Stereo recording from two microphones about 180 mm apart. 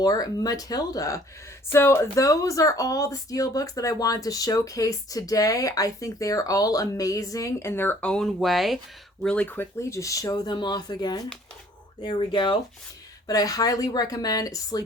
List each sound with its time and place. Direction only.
0.0 s speech: 20° left (ahead or behind)